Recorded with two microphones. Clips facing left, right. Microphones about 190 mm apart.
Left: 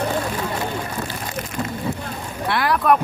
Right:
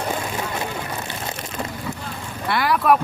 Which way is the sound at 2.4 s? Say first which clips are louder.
Even; centre (ahead or behind).